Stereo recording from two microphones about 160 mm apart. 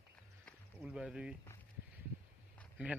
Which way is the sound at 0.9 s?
5° right (ahead or behind).